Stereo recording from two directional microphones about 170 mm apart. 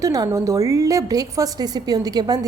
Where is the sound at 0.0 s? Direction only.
20° right (ahead or behind).